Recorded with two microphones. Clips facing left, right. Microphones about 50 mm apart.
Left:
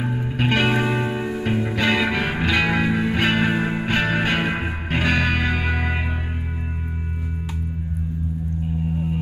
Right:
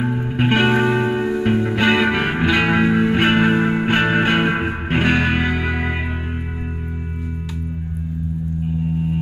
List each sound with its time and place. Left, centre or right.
0.0 s music: right
1.9 s music: right